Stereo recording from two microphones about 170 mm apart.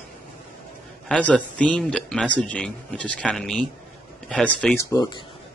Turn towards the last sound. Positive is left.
turn(degrees=20)  # may be behind; listen again after turning